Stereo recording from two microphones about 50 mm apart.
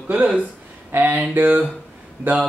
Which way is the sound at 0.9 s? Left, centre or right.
Right.